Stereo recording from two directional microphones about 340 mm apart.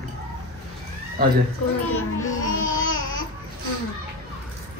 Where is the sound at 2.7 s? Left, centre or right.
Left.